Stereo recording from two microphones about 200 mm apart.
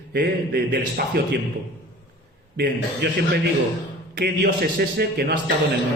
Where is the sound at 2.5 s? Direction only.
55° right (ahead or behind).